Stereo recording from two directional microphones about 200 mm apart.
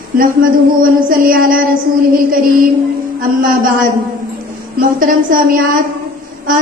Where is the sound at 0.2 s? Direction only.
45° right (ahead or behind).